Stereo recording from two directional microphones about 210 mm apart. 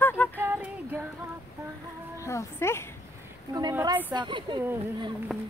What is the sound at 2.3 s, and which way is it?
Speech, 15° left (ahead or behind).